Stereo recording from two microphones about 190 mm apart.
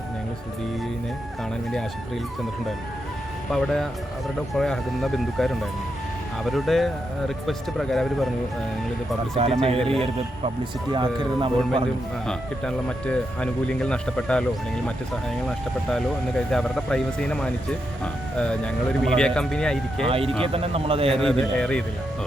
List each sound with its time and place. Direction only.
3.5 s speech: centre (ahead or behind)
9.3 s a man's voice: 30° right (ahead or behind)
9.8 s speech: centre (ahead or behind)
10.6 s speech: 25° right (ahead or behind)
12.2 s speech: 5° left (ahead or behind)
20.1 s a man's voice: 30° right (ahead or behind)
21.2 s speech: 5° left (ahead or behind)